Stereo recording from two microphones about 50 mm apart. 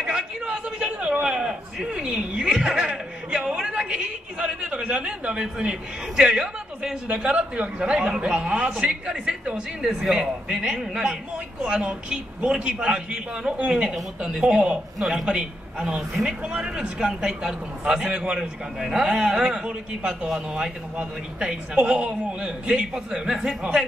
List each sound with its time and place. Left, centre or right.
0.0 s a sound: centre
2.0 s a man's voice: centre
11.6 s a man's voice: right
18.8 s a woman's voice: centre